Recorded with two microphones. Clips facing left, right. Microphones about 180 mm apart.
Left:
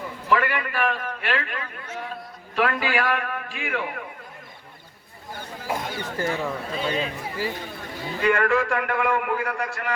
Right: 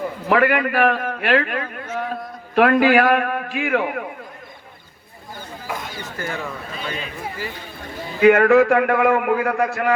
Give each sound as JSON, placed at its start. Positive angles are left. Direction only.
{"t": 0.3, "sound": "a man's voice", "side_deg": -55}
{"t": 5.6, "sound": "speech", "side_deg": 30}
{"t": 8.2, "sound": "a man's voice", "side_deg": -60}